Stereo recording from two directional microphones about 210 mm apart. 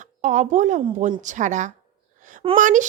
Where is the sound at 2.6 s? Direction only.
40° right (ahead or behind).